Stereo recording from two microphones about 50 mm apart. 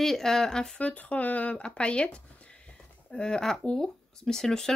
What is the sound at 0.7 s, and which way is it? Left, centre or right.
Speech, left.